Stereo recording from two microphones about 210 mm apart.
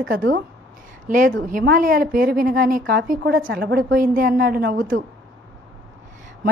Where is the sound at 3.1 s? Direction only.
40° right (ahead or behind).